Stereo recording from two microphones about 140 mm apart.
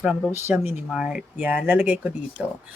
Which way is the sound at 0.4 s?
15° right (ahead or behind).